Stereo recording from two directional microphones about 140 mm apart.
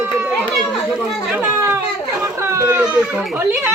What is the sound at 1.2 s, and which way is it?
Children playing, 15° right (ahead or behind).